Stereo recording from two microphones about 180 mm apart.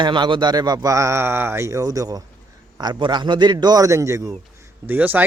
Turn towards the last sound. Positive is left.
turn(degrees=-10)  # may be behind; listen again after turning